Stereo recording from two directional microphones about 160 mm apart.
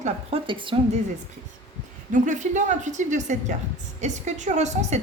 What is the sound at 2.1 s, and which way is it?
A woman's voice, 50° right (ahead or behind).